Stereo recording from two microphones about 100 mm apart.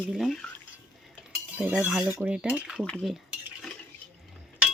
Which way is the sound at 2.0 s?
10° right (ahead or behind).